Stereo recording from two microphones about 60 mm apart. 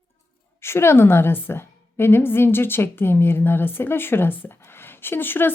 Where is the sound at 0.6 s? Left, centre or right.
Left.